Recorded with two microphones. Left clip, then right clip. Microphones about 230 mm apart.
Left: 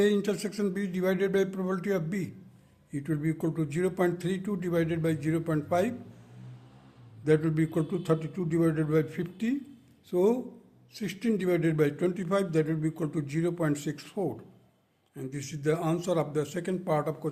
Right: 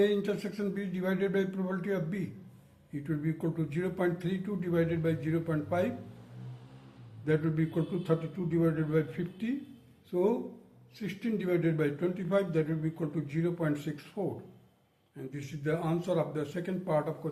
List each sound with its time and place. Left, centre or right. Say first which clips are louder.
0.0 s a man's voice: left 2 dB; left
7.3 s a man's voice: left 5 dB; left